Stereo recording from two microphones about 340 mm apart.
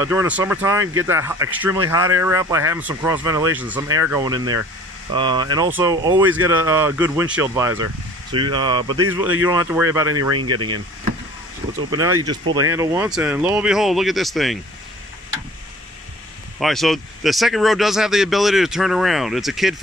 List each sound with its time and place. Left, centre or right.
0.0 s speech: centre
10.5 s speech: right
11.9 s speech: centre
12.4 s speech: right
12.7 s speech: centre
16.5 s speech: centre